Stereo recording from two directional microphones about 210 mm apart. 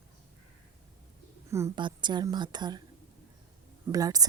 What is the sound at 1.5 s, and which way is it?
A woman's voice, 15° right (ahead or behind).